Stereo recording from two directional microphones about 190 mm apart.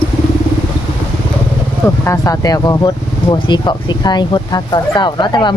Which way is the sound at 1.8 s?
15° left (ahead or behind).